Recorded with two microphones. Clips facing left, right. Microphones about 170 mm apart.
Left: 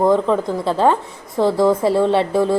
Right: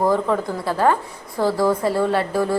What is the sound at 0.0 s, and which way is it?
A woman's voice, 20° left (ahead or behind).